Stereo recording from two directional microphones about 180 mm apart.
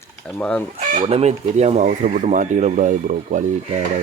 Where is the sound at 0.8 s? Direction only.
40° right (ahead or behind).